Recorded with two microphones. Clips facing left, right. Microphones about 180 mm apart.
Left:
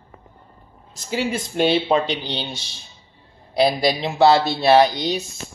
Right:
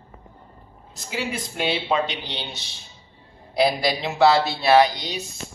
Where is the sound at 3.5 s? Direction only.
25° left (ahead or behind).